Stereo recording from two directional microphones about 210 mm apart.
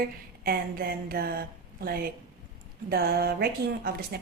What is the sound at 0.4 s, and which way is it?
A woman's voice, 45° right (ahead or behind).